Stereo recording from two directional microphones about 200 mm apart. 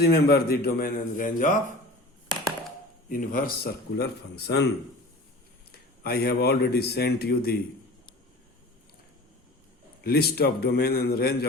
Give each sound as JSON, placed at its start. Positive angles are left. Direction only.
{"t": 0.0, "sound": "a man's voice", "side_deg": 50}
{"t": 2.3, "sound": "a sound", "side_deg": -25}
{"t": 3.1, "sound": "a man's voice", "side_deg": 45}
{"t": 6.0, "sound": "a man's voice", "side_deg": 50}
{"t": 10.0, "sound": "a man's voice", "side_deg": 50}